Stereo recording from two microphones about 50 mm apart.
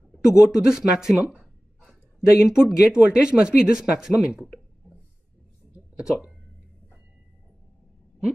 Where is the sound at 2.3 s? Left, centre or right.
Centre.